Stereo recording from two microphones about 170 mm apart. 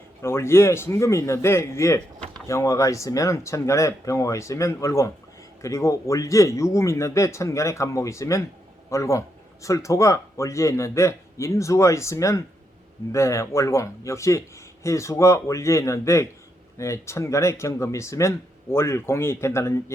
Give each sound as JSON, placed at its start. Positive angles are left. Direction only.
{"t": 0.2, "sound": "speech", "side_deg": 15}